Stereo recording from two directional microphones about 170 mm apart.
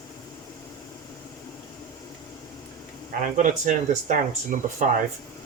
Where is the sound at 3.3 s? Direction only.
45° right (ahead or behind).